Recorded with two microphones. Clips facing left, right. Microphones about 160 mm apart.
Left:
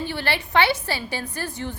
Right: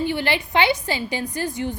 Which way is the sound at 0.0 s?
15° right (ahead or behind).